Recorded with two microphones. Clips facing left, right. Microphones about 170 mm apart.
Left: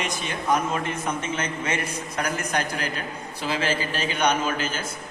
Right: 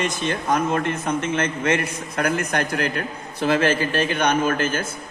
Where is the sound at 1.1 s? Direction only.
55° right (ahead or behind).